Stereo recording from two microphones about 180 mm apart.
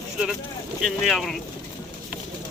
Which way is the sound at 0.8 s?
Centre (ahead or behind).